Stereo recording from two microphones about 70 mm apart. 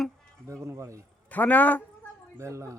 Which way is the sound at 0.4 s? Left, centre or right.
Right.